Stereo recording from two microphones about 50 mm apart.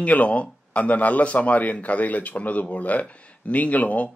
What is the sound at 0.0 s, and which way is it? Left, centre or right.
A man's voice, left.